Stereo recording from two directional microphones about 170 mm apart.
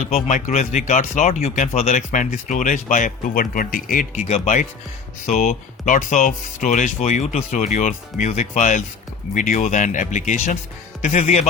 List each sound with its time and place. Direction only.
0.0 s speech: 45° left (ahead or behind)
4.3 s speech: 40° left (ahead or behind)